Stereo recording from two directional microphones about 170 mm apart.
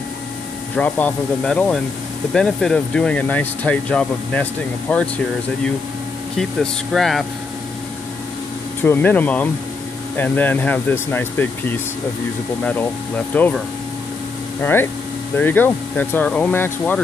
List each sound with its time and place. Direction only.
0.7 s speech: 10° left (ahead or behind)
6.3 s speech: centre (ahead or behind)
8.8 s speech: 10° left (ahead or behind)
13.3 s speech: 10° left (ahead or behind)
14.6 s speech: 10° left (ahead or behind)